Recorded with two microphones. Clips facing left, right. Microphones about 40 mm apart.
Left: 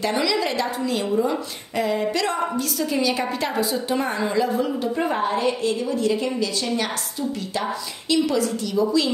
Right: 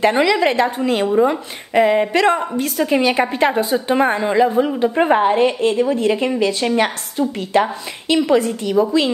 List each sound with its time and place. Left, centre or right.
0.0 s a woman's voice: right